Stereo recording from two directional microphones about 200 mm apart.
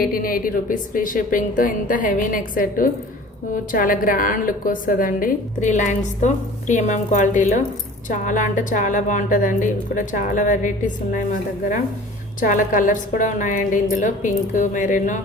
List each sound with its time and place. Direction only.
0.0 s a woman's voice: 45° left (ahead or behind)
12.4 s a woman's voice: 40° left (ahead or behind)